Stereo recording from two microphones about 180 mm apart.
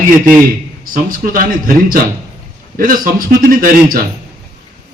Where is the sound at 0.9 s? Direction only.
50° right (ahead or behind).